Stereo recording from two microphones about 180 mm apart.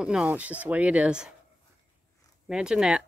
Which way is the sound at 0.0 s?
5° right (ahead or behind).